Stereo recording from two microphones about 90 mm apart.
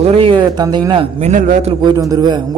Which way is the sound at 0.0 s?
90° right.